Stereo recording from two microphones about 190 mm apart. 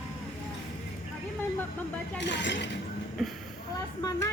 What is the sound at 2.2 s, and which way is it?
Speech, 65° left (ahead or behind).